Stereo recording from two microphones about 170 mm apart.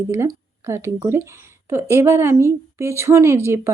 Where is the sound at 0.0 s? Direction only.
15° right (ahead or behind).